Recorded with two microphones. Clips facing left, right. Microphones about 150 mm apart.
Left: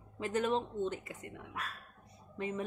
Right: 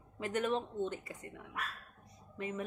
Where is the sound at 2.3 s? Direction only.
30° left (ahead or behind).